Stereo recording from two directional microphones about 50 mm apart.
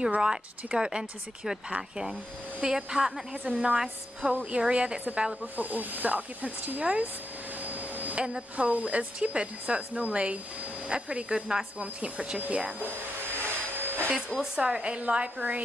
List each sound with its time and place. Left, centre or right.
0.2 s speech: centre
5.4 s speech: right
7.6 s vacuum cleaner: right
8.2 s speech: right
13.3 s vacuum cleaner: right
14.4 s speech: centre